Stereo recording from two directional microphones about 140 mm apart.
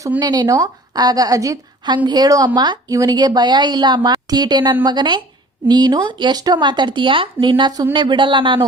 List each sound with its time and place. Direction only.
0.2 s a woman's voice: 30° right (ahead or behind)